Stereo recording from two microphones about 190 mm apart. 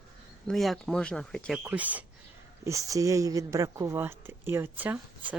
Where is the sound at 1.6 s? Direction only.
10° right (ahead or behind).